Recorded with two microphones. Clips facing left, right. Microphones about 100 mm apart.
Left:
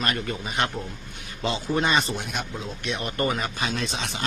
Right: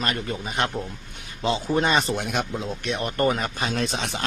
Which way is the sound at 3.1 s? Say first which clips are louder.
Right 4 dB; 40° right (ahead or behind).